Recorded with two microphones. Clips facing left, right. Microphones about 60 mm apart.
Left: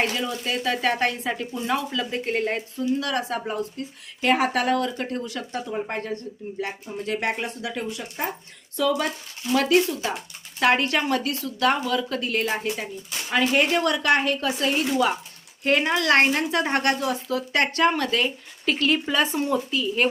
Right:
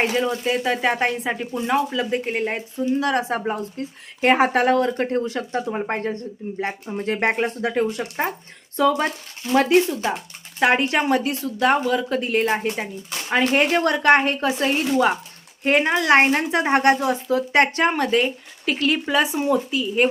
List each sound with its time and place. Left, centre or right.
0.0 s speech: right
2.8 s speech: right
15.6 s speech: right
18.6 s speech: centre